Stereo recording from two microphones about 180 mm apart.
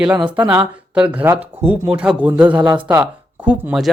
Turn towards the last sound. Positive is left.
turn(degrees=-5)  # may be behind; listen again after turning